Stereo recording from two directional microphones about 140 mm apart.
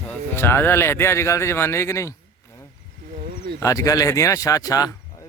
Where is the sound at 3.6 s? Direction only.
25° left (ahead or behind).